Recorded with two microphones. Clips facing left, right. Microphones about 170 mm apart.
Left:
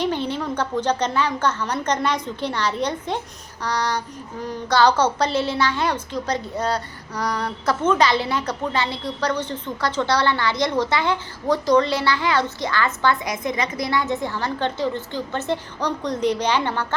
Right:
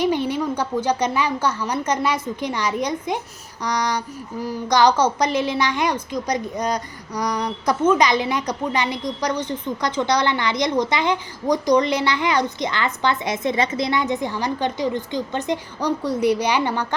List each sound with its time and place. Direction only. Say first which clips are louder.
0.0 s a woman's voice: right 3 dB; 10° right (ahead or behind)